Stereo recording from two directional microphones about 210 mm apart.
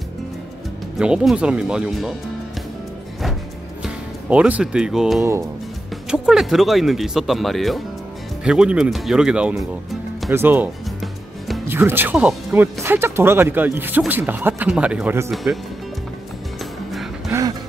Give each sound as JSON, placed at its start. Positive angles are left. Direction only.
{"t": 0.9, "sound": "speech", "side_deg": -5}
{"t": 3.8, "sound": "speech", "side_deg": -5}
{"t": 10.3, "sound": "music", "side_deg": -10}
{"t": 11.6, "sound": "speech", "side_deg": -10}
{"t": 17.3, "sound": "music", "side_deg": -15}